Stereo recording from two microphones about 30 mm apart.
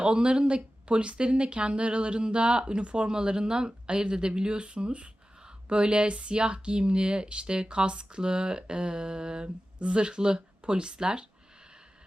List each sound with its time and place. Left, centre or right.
0.0 s speech: right